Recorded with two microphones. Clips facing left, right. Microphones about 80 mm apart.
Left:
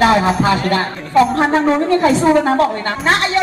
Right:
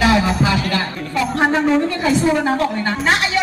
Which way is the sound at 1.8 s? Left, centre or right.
Left.